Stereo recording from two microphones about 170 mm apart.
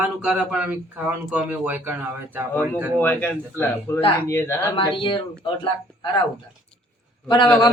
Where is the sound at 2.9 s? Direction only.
10° left (ahead or behind).